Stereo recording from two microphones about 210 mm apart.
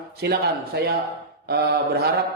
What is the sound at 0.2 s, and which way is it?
A man's voice, 50° right (ahead or behind).